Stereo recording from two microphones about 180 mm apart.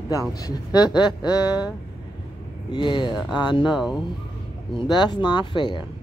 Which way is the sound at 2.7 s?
25° left (ahead or behind).